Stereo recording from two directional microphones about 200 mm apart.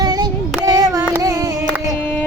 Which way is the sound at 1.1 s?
15° right (ahead or behind).